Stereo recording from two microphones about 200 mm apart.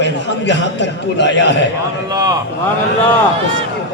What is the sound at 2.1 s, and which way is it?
Speech, 20° right (ahead or behind).